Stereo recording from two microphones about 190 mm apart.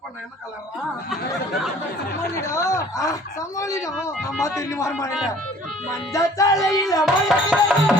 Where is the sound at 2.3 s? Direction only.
15° left (ahead or behind).